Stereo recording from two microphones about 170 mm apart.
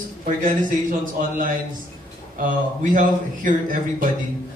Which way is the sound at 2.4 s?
50° right (ahead or behind).